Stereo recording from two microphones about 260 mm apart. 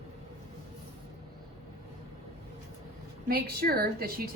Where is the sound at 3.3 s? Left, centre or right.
Right.